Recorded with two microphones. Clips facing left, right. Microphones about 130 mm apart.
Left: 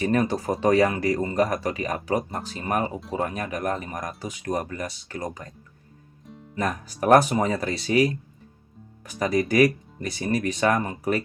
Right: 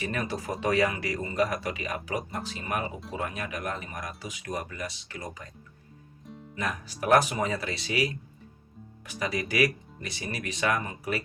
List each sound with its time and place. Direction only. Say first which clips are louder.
0.0 s speech: left 9 dB; 40° left (ahead or behind)
6.6 s speech: left 6 dB; 45° left (ahead or behind)